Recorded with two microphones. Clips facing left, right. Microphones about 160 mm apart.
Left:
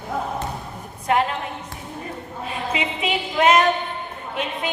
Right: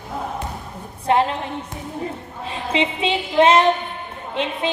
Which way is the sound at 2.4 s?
30° right (ahead or behind).